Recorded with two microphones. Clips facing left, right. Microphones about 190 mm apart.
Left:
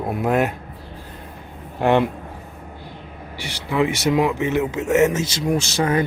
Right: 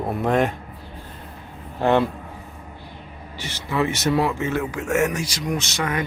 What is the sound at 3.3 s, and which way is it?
Speech, 15° left (ahead or behind).